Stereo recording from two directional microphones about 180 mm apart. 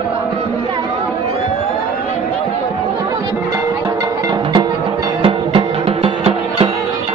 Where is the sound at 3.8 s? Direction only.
25° right (ahead or behind).